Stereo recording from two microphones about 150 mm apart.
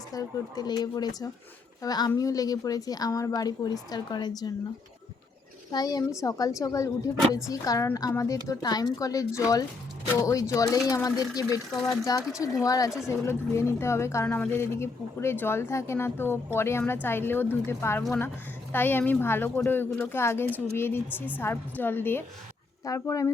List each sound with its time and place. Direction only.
0.1 s a woman's voice: 25° left (ahead or behind)
5.7 s a woman's voice: 25° left (ahead or behind)